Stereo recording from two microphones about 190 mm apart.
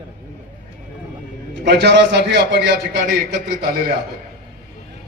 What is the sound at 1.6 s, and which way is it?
A man's voice, 60° right (ahead or behind).